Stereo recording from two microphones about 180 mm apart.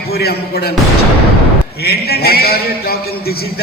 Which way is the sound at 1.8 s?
60° left (ahead or behind).